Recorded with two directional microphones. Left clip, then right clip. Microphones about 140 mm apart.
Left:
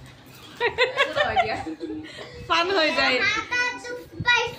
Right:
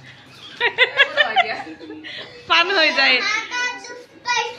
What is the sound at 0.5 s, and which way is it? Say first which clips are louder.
Snicker: right 6 dB; 20° left (ahead or behind).